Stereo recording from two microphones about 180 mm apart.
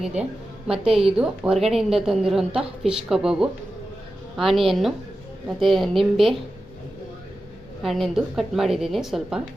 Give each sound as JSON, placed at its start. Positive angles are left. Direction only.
{"t": 0.0, "sound": "a woman's voice", "side_deg": -5}
{"t": 7.8, "sound": "a woman's voice", "side_deg": 0}